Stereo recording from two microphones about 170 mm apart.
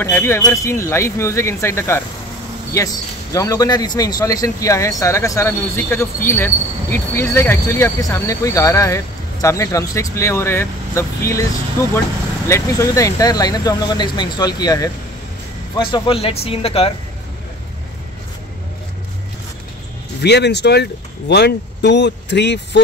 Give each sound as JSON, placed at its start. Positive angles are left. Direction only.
{"t": 0.0, "sound": "a man's voice", "side_deg": 15}
{"t": 3.3, "sound": "a man's voice", "side_deg": 20}
{"t": 20.2, "sound": "speech", "side_deg": 85}